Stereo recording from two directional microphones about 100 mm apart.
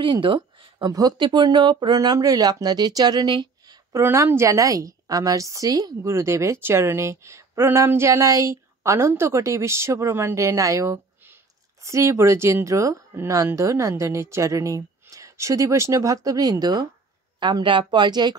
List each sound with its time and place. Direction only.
0.0 s speech: 55° right (ahead or behind)
0.9 s speech: 45° right (ahead or behind)
3.9 s a woman's voice: 25° right (ahead or behind)
6.1 s a woman's voice: 30° right (ahead or behind)
17.4 s speech: 50° right (ahead or behind)